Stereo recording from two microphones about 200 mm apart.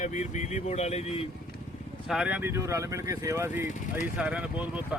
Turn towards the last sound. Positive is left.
turn(degrees=-5)  # may be behind; listen again after turning